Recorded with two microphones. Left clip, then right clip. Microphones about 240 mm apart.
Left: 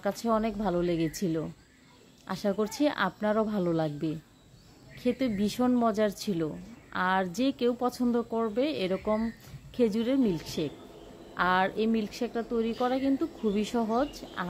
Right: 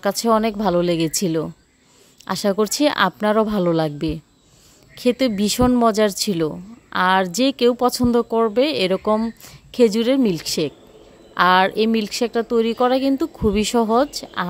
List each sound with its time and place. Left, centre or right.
0.0 s speech: right